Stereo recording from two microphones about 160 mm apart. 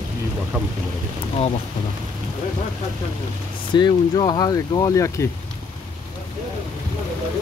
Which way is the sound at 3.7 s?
30° left (ahead or behind).